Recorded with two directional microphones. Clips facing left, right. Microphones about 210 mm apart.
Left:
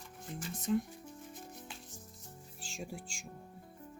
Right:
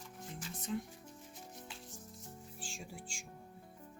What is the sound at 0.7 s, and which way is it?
Speech, 55° left (ahead or behind).